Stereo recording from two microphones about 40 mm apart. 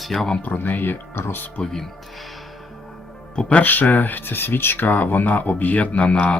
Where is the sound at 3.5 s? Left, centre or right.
Left.